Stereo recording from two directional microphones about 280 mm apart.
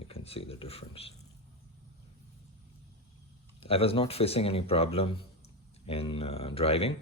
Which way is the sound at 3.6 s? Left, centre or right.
Left.